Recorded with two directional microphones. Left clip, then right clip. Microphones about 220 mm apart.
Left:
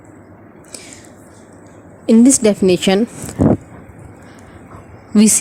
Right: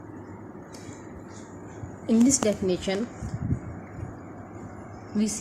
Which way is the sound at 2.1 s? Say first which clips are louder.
Left 11 dB; 40° left (ahead or behind).